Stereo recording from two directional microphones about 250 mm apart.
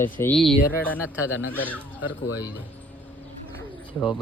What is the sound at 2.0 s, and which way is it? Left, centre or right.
Speech, centre.